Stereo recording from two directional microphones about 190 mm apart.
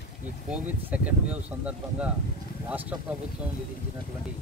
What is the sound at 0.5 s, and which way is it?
Speech, 5° right (ahead or behind).